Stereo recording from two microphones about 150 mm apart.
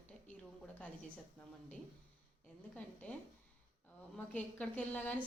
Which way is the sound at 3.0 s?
10° left (ahead or behind).